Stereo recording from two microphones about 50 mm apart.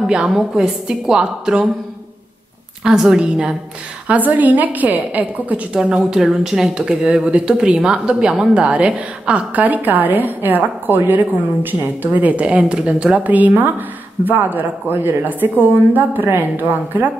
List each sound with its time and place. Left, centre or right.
0.4 s a woman's voice: centre
2.8 s a woman's voice: centre
4.1 s a woman's voice: right
5.7 s a woman's voice: centre
7.2 s a woman's voice: right